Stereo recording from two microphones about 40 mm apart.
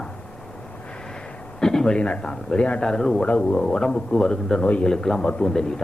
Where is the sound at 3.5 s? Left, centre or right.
Centre.